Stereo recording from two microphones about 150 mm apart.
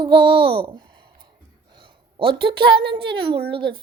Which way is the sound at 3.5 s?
35° right (ahead or behind).